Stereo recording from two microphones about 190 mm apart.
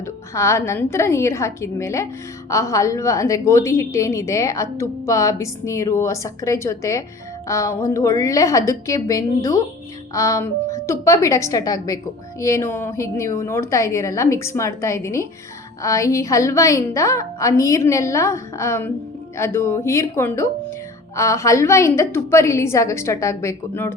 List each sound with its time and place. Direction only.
0.0 s a woman's voice: 15° left (ahead or behind)